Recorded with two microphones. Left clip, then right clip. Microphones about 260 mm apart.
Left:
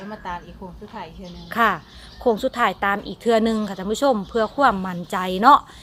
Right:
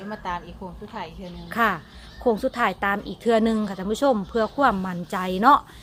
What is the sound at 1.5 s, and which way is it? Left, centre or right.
A woman's voice, centre.